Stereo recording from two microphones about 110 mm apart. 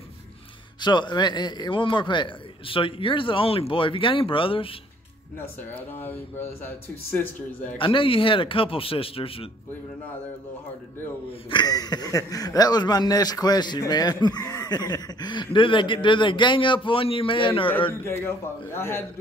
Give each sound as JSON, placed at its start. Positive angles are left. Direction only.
{"t": 0.7, "sound": "a man's voice", "side_deg": 45}
{"t": 5.8, "sound": "speech", "side_deg": 20}
{"t": 7.8, "sound": "speech", "side_deg": 50}
{"t": 11.5, "sound": "speech", "side_deg": 35}
{"t": 18.0, "sound": "a man's voice", "side_deg": 20}